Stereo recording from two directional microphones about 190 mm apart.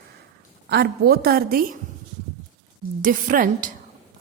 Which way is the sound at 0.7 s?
60° right (ahead or behind).